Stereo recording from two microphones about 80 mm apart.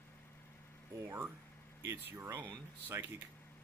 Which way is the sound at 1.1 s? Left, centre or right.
Right.